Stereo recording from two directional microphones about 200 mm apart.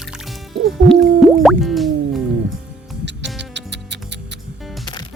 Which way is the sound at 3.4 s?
60° right (ahead or behind).